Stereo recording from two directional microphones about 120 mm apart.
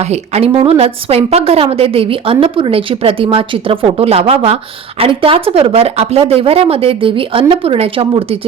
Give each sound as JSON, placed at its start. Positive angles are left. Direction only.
{"t": 0.0, "sound": "a woman's voice", "side_deg": -65}